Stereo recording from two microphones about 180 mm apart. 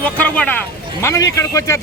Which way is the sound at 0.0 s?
5° left (ahead or behind).